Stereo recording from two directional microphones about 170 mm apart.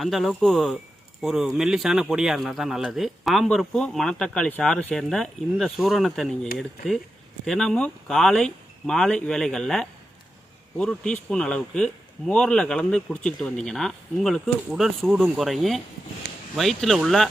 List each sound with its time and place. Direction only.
0.0 s a man's voice: centre (ahead or behind)